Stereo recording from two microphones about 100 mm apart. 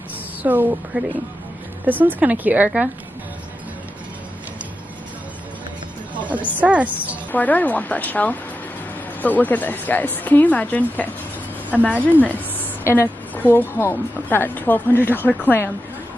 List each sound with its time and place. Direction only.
0.4 s speech: 15° right (ahead or behind)
6.1 s music: 15° right (ahead or behind)
6.6 s speech: 10° right (ahead or behind)
7.3 s a woman's voice: 15° left (ahead or behind)